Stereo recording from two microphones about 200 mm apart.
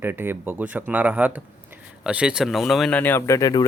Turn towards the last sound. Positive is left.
turn(degrees=20)  # may be behind; listen again after turning